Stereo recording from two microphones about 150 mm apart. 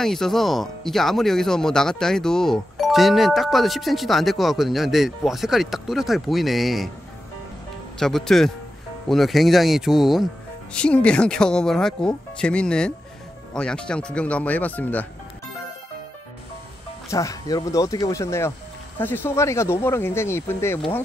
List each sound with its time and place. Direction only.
0.0 s speech: centre (ahead or behind)
8.0 s speech: 5° left (ahead or behind)
17.1 s speech: 20° left (ahead or behind)